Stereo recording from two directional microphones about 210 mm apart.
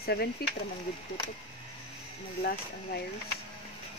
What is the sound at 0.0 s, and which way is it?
Speech, 50° left (ahead or behind).